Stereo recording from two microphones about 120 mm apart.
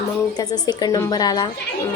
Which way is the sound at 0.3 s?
35° left (ahead or behind).